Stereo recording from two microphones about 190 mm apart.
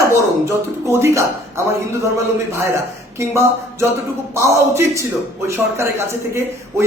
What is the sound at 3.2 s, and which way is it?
A man's voice, 15° right (ahead or behind).